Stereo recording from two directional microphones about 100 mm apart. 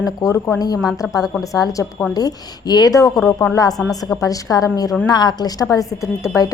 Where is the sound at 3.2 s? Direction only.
30° left (ahead or behind).